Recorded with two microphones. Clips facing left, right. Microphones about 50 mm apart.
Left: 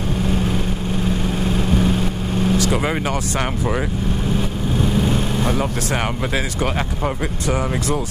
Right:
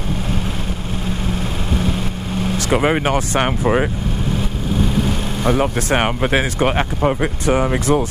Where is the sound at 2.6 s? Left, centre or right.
Right.